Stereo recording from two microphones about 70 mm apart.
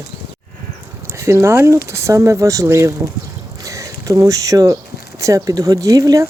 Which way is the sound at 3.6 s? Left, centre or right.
Right.